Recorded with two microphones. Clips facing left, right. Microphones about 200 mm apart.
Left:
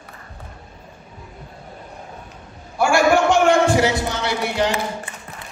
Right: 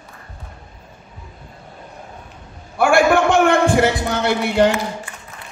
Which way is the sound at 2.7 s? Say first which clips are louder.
Right 2 dB; 55° right (ahead or behind).